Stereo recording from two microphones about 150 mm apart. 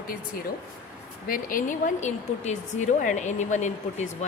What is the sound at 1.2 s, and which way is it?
Speech, 70° left (ahead or behind).